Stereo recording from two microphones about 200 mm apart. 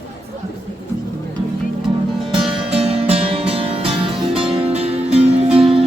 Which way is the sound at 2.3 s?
25° right (ahead or behind).